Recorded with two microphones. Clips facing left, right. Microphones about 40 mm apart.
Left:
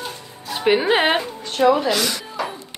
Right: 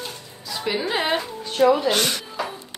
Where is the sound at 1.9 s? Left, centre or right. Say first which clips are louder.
Left 1 dB; right.